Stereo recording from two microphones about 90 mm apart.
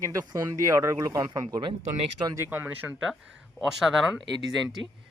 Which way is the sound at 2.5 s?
25° right (ahead or behind).